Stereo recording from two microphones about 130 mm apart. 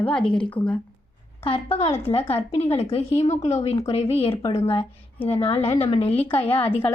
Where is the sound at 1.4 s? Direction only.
50° left (ahead or behind).